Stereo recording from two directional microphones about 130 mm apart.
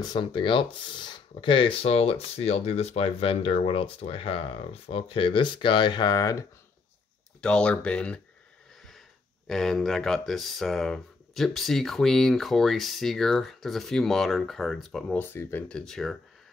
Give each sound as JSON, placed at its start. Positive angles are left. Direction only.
{"t": 0.0, "sound": "speech", "side_deg": 35}
{"t": 7.4, "sound": "speech", "side_deg": 10}
{"t": 9.5, "sound": "speech", "side_deg": 0}
{"t": 15.1, "sound": "speech", "side_deg": 15}
{"t": 15.8, "sound": "speech", "side_deg": 5}